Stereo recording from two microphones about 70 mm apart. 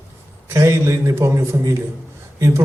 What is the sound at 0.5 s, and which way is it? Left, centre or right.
A man's voice, right.